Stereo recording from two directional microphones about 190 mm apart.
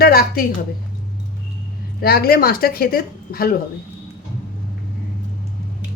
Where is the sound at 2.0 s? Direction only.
55° left (ahead or behind).